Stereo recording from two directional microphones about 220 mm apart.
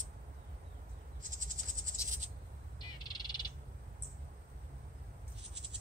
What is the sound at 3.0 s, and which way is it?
Frog, 20° left (ahead or behind).